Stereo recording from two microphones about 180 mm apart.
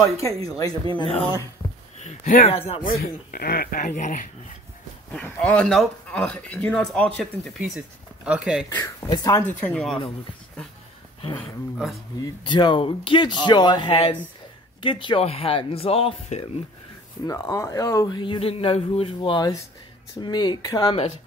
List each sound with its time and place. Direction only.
0.5 s a man's voice: 20° left (ahead or behind)
2.0 s speech: 40° left (ahead or behind)
2.8 s speech: 50° left (ahead or behind)
5.1 s speech: 10° left (ahead or behind)
8.6 s speech: 20° left (ahead or behind)
11.3 s speech: centre (ahead or behind)
12.4 s a man's voice: 25° left (ahead or behind)
17.3 s a man's voice: 15° left (ahead or behind)